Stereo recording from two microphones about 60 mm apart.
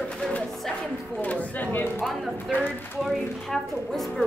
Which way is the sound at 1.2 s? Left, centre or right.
Left.